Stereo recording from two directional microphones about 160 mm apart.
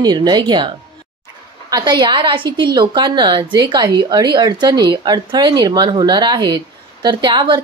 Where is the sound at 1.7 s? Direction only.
30° right (ahead or behind).